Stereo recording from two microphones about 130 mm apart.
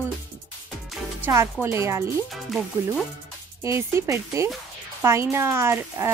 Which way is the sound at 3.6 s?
20° right (ahead or behind).